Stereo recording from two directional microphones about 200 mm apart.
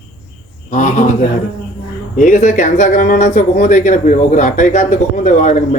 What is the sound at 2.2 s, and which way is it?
Speech, 40° left (ahead or behind).